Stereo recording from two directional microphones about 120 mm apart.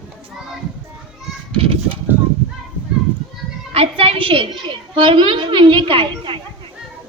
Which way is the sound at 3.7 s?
55° right (ahead or behind).